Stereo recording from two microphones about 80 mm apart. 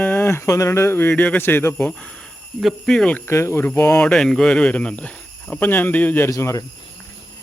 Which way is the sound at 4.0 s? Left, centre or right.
Centre.